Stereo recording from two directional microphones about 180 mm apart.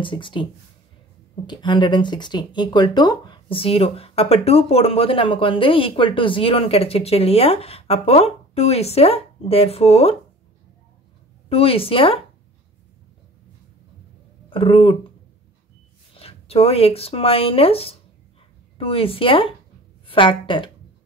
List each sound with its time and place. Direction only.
0.0 s a woman's voice: 25° left (ahead or behind)
11.4 s speech: 30° left (ahead or behind)
14.5 s a woman's voice: 30° left (ahead or behind)
16.2 s a woman's voice: 35° left (ahead or behind)